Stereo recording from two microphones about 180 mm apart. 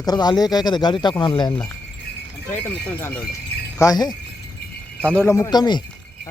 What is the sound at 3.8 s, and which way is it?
Speech, 20° left (ahead or behind).